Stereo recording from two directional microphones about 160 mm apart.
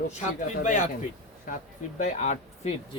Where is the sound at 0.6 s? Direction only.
50° left (ahead or behind).